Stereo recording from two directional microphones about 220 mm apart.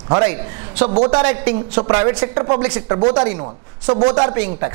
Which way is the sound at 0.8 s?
30° right (ahead or behind).